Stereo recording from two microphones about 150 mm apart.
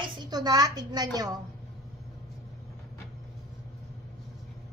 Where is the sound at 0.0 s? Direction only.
30° right (ahead or behind).